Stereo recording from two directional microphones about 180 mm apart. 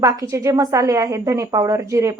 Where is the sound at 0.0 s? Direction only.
15° right (ahead or behind).